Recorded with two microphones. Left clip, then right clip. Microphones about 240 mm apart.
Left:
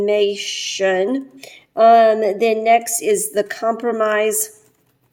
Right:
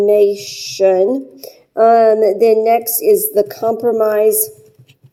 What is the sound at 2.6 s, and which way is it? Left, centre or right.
Speech, left.